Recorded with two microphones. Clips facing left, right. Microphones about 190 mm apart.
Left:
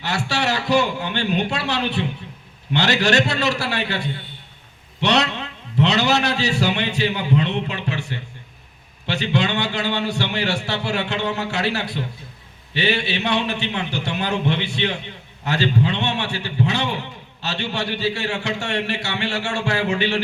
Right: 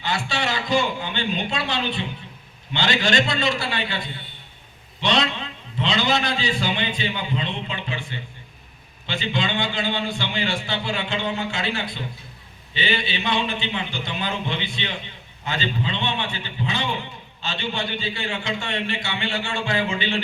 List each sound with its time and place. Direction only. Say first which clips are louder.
0.0 s a man's voice: left 3 dB; 70° left (ahead or behind)